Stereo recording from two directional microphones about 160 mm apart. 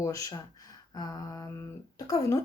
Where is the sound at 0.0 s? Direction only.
20° left (ahead or behind).